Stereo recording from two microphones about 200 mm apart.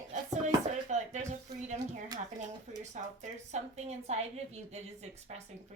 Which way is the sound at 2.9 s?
35° right (ahead or behind).